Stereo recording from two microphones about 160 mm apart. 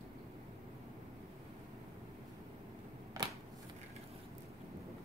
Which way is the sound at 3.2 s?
20° right (ahead or behind).